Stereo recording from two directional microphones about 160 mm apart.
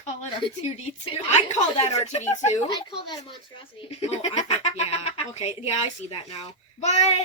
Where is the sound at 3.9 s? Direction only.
40° left (ahead or behind).